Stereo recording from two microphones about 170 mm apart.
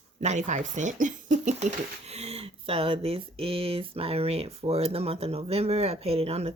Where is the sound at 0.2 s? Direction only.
45° right (ahead or behind).